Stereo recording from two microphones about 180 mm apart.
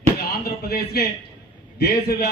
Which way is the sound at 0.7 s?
60° left (ahead or behind).